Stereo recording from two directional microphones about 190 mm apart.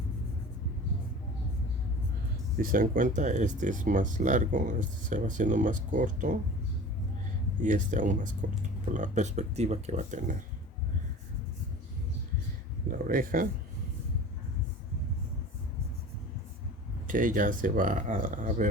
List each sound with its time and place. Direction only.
2.6 s speech: 45° right (ahead or behind)
7.6 s speech: 40° right (ahead or behind)
13.1 s speech: 50° right (ahead or behind)
17.1 s speech: 45° right (ahead or behind)